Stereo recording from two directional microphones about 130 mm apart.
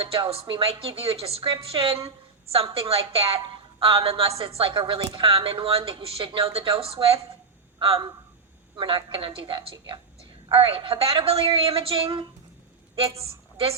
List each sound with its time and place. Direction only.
0.0 s a woman's voice: 45° right (ahead or behind)